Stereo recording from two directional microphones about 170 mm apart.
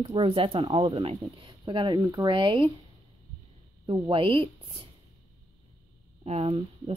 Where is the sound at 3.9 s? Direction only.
30° right (ahead or behind).